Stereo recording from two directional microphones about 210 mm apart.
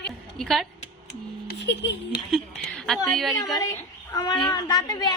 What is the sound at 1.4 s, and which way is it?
Speech, 55° left (ahead or behind).